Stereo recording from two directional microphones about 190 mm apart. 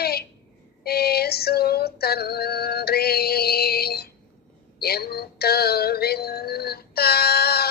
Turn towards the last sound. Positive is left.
turn(degrees=55)  # may be behind; listen again after turning